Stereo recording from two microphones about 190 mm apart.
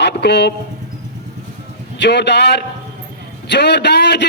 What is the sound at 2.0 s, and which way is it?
A man's voice, 65° left (ahead or behind).